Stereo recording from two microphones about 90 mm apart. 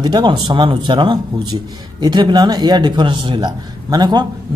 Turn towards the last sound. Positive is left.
turn(degrees=-50)  # may be behind; listen again after turning